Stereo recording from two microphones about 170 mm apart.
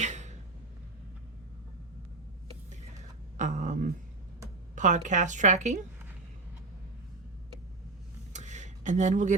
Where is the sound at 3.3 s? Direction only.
45° right (ahead or behind).